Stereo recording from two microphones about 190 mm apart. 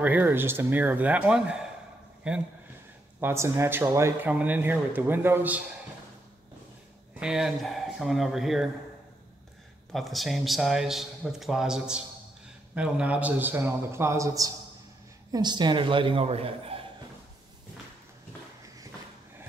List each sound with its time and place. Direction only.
0.0 s a man's voice: 10° right (ahead or behind)
7.2 s a man's voice: 5° right (ahead or behind)
9.9 s a man's voice: centre (ahead or behind); by 16.8 s 30° right (ahead or behind)